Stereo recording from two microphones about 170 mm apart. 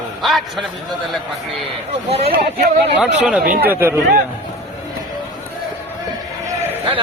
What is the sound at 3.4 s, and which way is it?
Speech, 55° right (ahead or behind).